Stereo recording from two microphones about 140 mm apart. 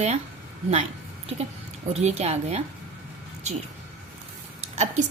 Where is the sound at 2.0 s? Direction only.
50° right (ahead or behind).